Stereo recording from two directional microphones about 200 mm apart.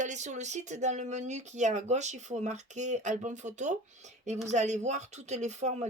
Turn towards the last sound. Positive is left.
turn(degrees=-35)  # may be behind; listen again after turning